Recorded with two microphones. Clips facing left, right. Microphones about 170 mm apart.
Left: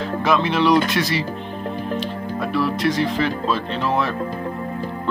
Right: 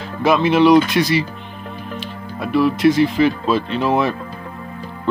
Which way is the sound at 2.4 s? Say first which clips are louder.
Right 7 dB; 5° right (ahead or behind).